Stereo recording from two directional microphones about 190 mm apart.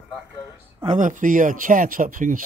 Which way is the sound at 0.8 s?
40° right (ahead or behind).